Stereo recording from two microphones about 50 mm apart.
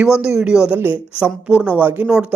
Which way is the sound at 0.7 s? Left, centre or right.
Right.